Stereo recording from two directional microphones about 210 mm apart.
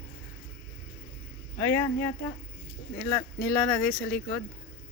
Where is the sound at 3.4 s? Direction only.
10° left (ahead or behind).